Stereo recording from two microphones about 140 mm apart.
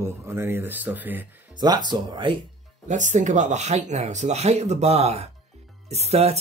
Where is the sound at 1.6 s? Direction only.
30° right (ahead or behind).